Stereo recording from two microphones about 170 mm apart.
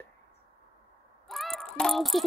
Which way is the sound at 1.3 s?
Centre (ahead or behind).